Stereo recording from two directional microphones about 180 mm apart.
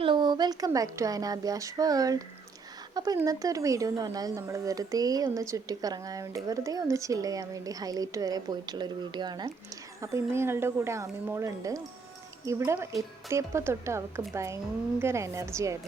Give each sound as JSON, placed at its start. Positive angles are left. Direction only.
{"t": 0.0, "sound": "a woman's voice", "side_deg": -25}